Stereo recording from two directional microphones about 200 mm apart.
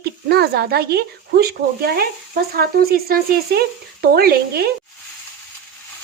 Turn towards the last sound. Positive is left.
turn(degrees=-50)  # may be behind; listen again after turning